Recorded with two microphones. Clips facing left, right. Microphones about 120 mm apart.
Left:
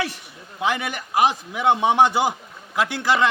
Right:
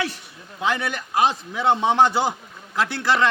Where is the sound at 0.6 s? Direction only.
15° left (ahead or behind).